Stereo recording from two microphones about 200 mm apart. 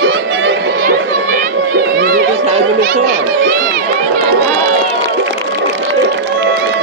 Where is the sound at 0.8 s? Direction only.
45° right (ahead or behind).